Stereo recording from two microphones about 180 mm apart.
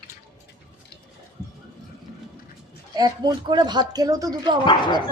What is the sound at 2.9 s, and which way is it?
Speech, 20° right (ahead or behind).